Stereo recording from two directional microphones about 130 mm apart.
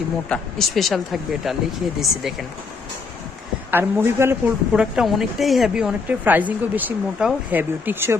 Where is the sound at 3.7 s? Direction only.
15° right (ahead or behind).